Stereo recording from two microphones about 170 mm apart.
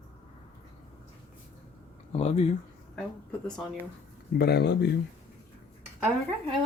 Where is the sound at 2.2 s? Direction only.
40° left (ahead or behind).